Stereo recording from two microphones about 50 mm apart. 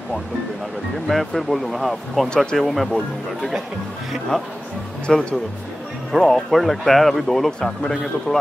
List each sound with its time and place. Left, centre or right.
1.0 s a man's voice: centre
4.3 s speech: centre
6.2 s a man's voice: centre